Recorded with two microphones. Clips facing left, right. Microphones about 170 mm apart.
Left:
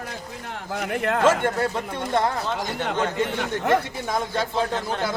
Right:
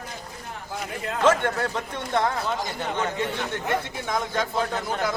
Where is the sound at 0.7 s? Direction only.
70° left (ahead or behind).